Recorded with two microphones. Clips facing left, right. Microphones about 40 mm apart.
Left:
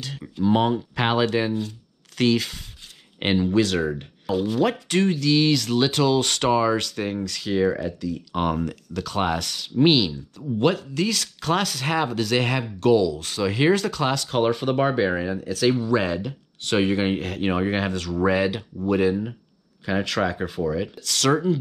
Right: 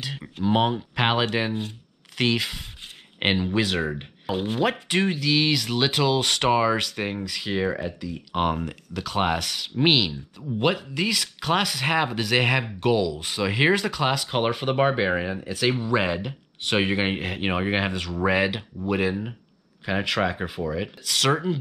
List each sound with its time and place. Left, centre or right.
0.0 s speech: right
2.1 s speech: centre